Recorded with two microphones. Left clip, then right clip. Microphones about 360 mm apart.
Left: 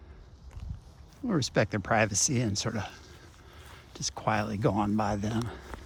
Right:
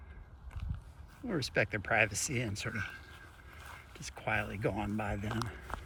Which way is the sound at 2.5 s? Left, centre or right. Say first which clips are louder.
Left 5 dB; centre.